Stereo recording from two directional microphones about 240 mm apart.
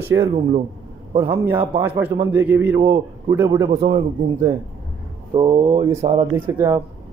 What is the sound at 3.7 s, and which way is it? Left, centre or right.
Speech, right.